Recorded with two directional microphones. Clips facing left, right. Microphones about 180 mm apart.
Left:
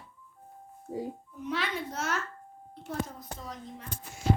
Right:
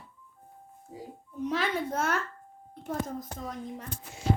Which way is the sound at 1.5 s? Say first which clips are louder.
Right 3 dB; 50° right (ahead or behind).